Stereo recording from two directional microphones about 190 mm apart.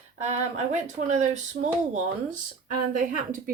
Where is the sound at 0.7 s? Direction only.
40° right (ahead or behind).